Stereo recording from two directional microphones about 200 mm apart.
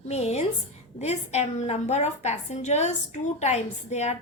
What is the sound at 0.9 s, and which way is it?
A woman's voice, 35° left (ahead or behind).